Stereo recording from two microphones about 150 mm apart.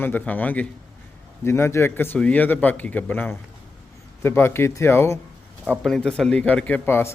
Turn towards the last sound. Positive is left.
turn(degrees=15)  # may be behind; listen again after turning